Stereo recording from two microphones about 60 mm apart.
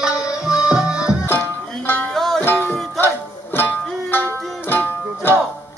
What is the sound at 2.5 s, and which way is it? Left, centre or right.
Music, left.